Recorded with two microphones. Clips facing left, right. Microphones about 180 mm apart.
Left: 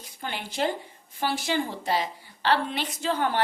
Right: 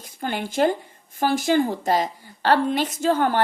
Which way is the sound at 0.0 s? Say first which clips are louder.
Right 7 dB; 45° right (ahead or behind).